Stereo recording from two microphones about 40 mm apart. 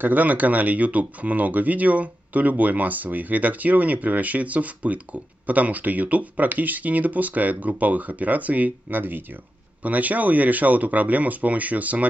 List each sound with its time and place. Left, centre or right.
0.0 s speech: right
9.8 s speech: right